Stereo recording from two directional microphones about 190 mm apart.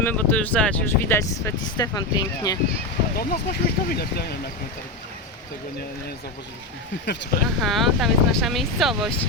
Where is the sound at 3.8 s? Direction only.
55° left (ahead or behind).